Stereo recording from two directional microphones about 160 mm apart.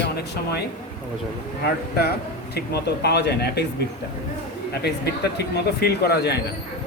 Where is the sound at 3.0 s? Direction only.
90° left.